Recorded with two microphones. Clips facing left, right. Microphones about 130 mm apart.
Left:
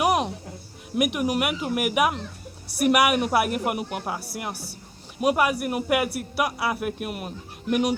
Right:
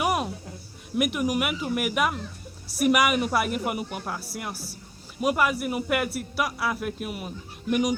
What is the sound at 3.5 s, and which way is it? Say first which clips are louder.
Speech: left 2 dB; 55° left (ahead or behind).